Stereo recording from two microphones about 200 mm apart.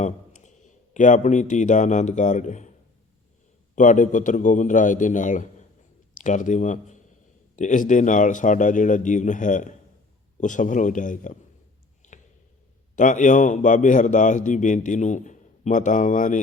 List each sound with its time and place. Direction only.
0.0 s speech: 35° left (ahead or behind)
3.8 s a man's voice: 40° left (ahead or behind)
12.1 s a sound: 35° left (ahead or behind)
13.0 s a man's voice: 40° left (ahead or behind)